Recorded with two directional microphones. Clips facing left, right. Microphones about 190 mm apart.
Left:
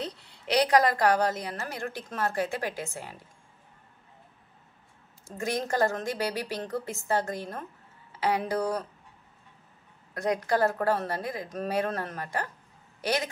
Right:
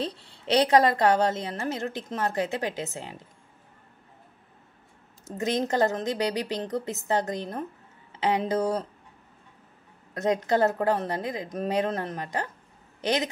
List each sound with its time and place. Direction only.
0.0 s a woman's voice: 30° right (ahead or behind)
5.2 s a woman's voice: 20° right (ahead or behind)
10.1 s a woman's voice: 25° right (ahead or behind)